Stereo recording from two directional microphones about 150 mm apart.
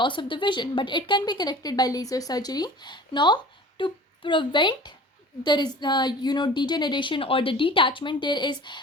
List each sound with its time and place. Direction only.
0.0 s a woman's voice: 30° left (ahead or behind)